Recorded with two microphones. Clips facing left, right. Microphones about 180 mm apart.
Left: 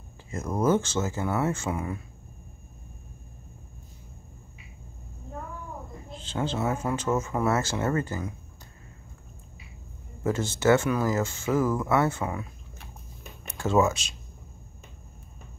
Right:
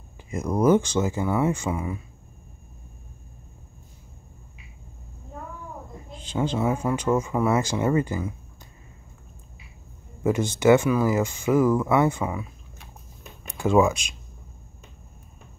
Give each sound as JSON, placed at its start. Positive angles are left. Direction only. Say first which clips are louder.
{"t": 0.3, "sound": "speech", "louder": "right 5 dB", "side_deg": -15}
{"t": 6.1, "sound": "speech", "louder": "right 4 dB", "side_deg": -15}
{"t": 10.2, "sound": "speech", "louder": "right 4 dB", "side_deg": -15}
{"t": 13.5, "sound": "speech", "louder": "right 4 dB", "side_deg": -15}